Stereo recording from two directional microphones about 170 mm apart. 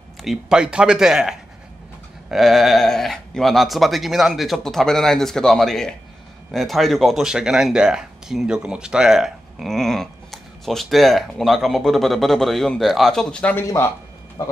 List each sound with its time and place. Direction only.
0.2 s a man's voice: centre (ahead or behind); by 13.9 s 15° left (ahead or behind)